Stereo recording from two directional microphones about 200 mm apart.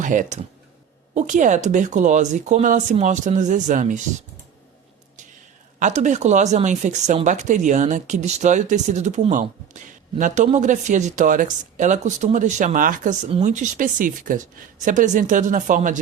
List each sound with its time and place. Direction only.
0.0 s speech: 40° right (ahead or behind)
5.8 s speech: 35° right (ahead or behind)